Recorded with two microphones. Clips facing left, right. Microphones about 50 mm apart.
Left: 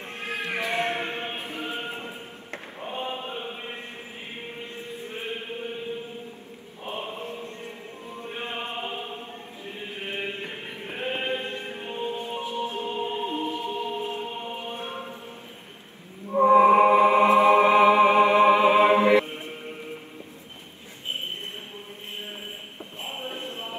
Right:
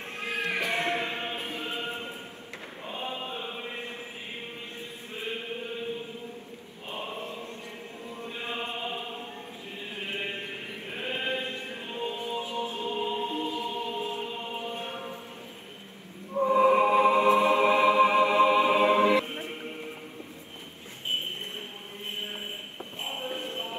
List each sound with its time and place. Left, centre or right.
0.5 s a sound: left
1.5 s chant: left
5.1 s chant: left
6.9 s choir: left
8.3 s chant: left
10.4 s music: left
16.4 s music: left
19.2 s music: right
22.9 s music: left